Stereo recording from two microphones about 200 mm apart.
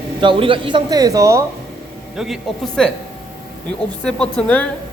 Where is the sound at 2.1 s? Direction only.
Centre (ahead or behind).